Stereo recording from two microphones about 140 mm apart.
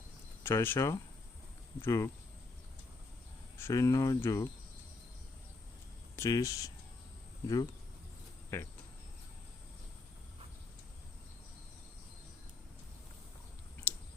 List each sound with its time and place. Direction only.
0.4 s speech: 15° left (ahead or behind)
3.6 s speech: 25° left (ahead or behind)
6.1 s speech: 20° left (ahead or behind)